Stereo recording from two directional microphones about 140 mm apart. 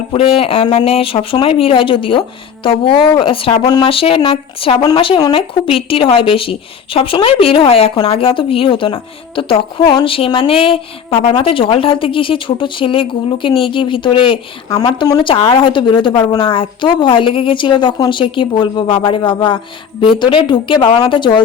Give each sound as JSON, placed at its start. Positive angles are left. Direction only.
{"t": 0.1, "sound": "a woman's voice", "side_deg": 40}